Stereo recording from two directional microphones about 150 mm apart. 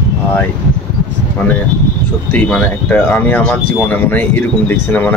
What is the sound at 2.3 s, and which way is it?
Speech, 10° left (ahead or behind).